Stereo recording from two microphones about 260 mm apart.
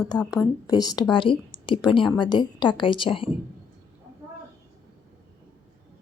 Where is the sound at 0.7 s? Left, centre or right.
Centre.